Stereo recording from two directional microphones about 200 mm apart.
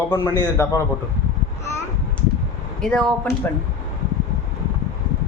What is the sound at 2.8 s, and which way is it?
Speech, 5° left (ahead or behind).